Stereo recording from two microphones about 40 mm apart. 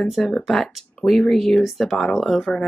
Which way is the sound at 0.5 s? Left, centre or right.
Centre.